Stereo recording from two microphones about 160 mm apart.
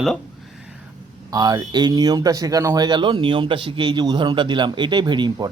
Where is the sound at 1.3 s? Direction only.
25° right (ahead or behind).